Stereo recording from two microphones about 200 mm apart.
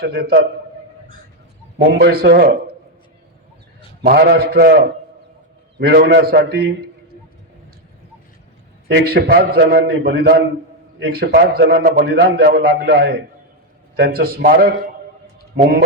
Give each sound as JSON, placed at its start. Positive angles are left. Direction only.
{"t": 0.0, "sound": "a man's voice", "side_deg": -55}
{"t": 1.8, "sound": "a man's voice", "side_deg": -50}
{"t": 4.0, "sound": "a man's voice", "side_deg": -50}
{"t": 5.8, "sound": "a man's voice", "side_deg": -55}
{"t": 9.0, "sound": "a man's voice", "side_deg": -50}